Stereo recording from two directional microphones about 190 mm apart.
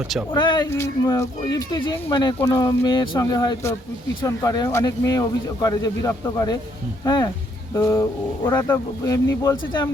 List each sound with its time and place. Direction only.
0.3 s a man's voice: 25° left (ahead or behind)